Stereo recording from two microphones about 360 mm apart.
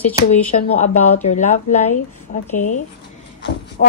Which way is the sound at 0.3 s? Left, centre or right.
Centre.